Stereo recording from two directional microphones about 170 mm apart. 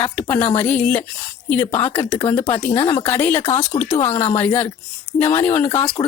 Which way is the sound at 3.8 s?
45° left (ahead or behind).